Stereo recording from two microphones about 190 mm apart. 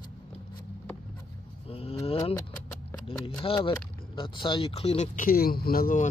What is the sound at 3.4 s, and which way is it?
Speech, 30° left (ahead or behind).